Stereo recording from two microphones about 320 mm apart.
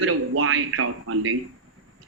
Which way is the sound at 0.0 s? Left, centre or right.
Right.